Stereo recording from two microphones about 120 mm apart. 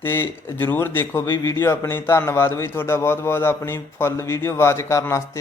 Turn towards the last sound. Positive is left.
turn(degrees=25)  # may be behind; listen again after turning